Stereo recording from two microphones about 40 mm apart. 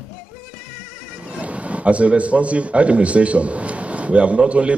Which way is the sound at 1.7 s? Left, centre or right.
Right.